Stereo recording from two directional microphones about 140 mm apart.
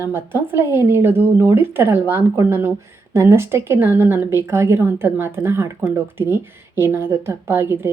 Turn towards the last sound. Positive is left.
turn(degrees=-15)  # may be behind; listen again after turning